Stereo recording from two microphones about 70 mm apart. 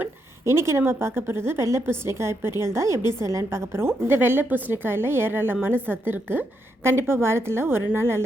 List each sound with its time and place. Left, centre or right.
0.4 s a woman's voice: right